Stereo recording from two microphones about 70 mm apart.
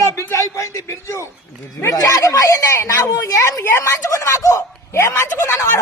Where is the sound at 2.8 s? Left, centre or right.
Left.